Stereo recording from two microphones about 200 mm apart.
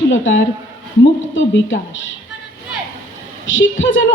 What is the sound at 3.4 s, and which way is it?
Speech, 75° left (ahead or behind).